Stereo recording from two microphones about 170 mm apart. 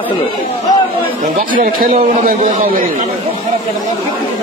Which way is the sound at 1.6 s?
45° right (ahead or behind).